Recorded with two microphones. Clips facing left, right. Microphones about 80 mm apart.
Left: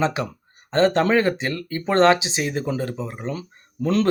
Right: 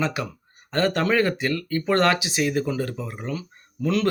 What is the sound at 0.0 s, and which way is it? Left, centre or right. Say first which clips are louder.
Speech: left 3 dB; left.